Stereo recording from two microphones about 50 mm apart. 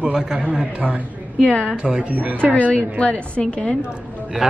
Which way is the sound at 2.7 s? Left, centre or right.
Left.